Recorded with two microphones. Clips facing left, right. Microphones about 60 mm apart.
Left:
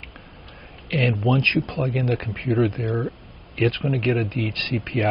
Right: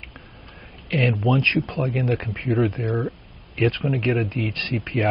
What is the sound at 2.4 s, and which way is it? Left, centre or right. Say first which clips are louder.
Speech: left 1 dB; centre.